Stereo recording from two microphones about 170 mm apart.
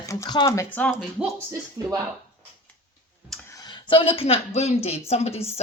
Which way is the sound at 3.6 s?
30° left (ahead or behind).